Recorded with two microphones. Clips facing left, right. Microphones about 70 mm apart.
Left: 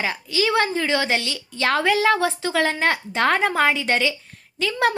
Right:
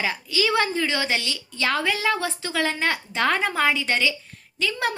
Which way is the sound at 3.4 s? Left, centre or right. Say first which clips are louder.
Left 3 dB; left.